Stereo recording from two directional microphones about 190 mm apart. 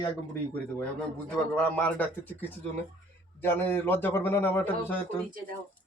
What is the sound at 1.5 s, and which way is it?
Speech, 10° left (ahead or behind).